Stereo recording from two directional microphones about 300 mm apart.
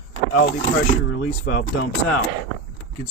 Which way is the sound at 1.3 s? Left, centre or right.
Left.